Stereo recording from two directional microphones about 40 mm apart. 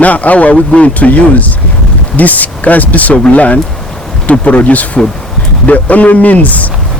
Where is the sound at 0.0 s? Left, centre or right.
Left.